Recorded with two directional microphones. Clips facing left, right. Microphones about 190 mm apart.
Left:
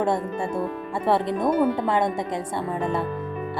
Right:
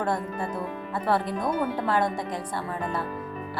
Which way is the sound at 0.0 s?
25° left (ahead or behind).